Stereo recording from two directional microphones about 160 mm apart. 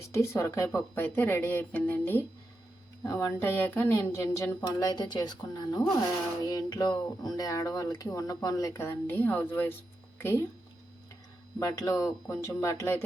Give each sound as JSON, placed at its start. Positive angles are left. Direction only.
{"t": 0.1, "sound": "speech", "side_deg": 15}
{"t": 11.6, "sound": "speech", "side_deg": 20}